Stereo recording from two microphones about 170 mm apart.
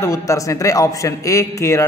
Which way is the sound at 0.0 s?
20° left (ahead or behind).